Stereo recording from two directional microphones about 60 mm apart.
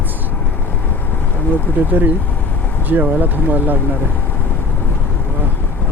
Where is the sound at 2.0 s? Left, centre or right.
Right.